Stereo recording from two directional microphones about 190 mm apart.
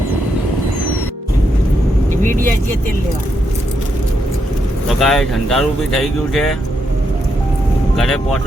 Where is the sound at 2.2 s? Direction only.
45° right (ahead or behind).